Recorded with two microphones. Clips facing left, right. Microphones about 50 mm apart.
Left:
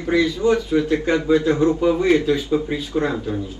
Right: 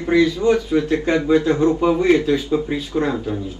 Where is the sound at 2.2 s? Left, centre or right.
Centre.